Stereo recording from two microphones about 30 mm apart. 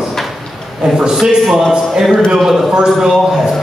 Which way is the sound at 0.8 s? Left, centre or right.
Right.